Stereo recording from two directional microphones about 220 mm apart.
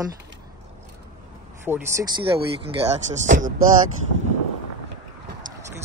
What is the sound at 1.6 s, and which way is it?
Speech, 10° right (ahead or behind).